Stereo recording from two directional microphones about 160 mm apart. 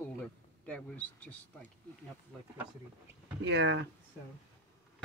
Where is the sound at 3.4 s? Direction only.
90° right.